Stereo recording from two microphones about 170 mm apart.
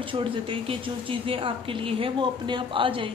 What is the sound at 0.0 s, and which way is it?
Speech, 30° right (ahead or behind).